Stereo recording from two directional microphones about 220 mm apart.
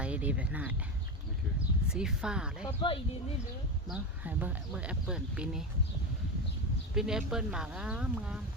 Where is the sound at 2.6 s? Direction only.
25° left (ahead or behind).